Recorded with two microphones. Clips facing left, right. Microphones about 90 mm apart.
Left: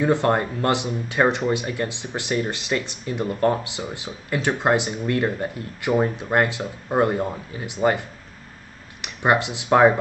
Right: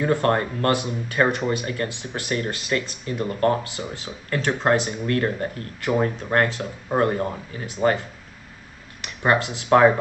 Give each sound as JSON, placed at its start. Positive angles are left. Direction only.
{"t": 0.0, "sound": "speech", "side_deg": 20}
{"t": 9.0, "sound": "speech", "side_deg": 20}